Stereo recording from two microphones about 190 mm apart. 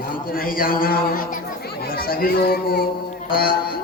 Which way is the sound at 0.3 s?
50° left (ahead or behind).